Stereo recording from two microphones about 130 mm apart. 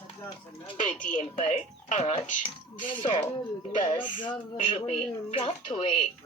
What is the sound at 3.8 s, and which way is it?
A woman's voice, 35° left (ahead or behind).